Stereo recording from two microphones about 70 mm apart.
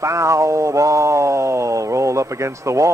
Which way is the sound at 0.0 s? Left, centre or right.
Right.